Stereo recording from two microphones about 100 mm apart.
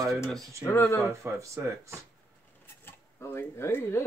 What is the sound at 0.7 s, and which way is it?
Speech, 20° left (ahead or behind).